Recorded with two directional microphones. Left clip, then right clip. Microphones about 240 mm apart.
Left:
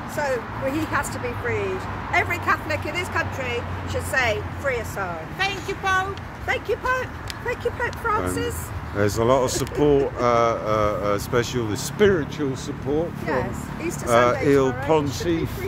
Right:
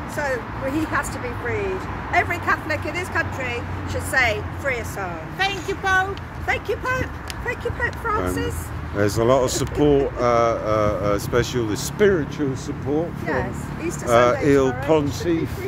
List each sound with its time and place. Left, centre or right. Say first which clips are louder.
0.2 s speech: even; centre
2.1 s speech: right 1 dB; left
4.1 s speech: right 3 dB; centre
5.4 s speech: right 2 dB; centre
6.4 s speech: even; centre
7.4 s speech: even; centre
8.9 s speech: right 1 dB; centre
13.2 s speech: even; centre
14.0 s speech: right 2 dB; centre